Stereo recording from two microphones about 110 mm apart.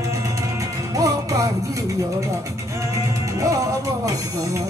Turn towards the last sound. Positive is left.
turn(degrees=-30)  # may be behind; listen again after turning